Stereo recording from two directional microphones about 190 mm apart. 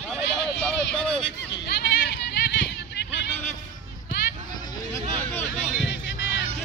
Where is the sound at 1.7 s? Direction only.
60° left (ahead or behind).